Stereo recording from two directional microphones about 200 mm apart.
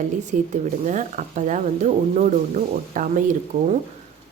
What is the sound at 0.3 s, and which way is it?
Speech, 35° right (ahead or behind).